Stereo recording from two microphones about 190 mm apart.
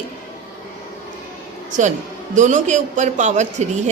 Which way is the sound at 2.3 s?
40° right (ahead or behind).